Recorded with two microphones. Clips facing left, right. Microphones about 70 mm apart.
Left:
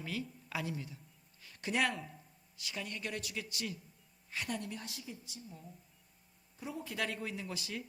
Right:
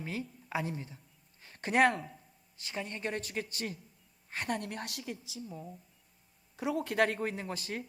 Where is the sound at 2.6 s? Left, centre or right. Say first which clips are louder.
Right 4 dB; right.